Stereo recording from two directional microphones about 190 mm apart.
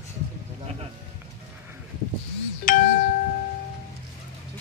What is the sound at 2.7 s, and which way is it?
Music, 45° left (ahead or behind).